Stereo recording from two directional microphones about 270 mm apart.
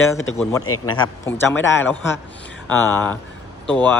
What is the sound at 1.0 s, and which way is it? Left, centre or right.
Speech, centre.